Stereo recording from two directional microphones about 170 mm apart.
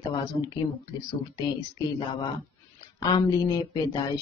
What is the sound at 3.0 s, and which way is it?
Speech, 25° left (ahead or behind).